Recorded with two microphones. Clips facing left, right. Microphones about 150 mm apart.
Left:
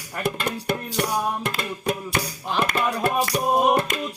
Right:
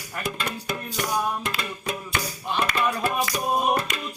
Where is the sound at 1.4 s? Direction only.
55° left (ahead or behind).